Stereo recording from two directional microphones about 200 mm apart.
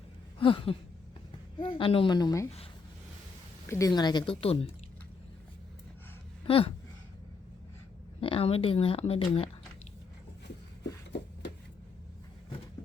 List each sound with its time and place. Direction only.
0.3 s a sound: 25° left (ahead or behind)
1.5 s speech: 25° left (ahead or behind)
3.7 s speech: 15° left (ahead or behind)
6.4 s speech: 25° left (ahead or behind)
8.2 s speech: 30° left (ahead or behind)